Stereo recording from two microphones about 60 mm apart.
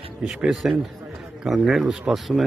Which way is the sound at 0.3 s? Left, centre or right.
Centre.